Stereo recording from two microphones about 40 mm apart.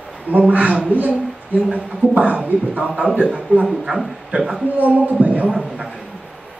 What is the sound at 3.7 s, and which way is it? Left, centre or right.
Speech, centre.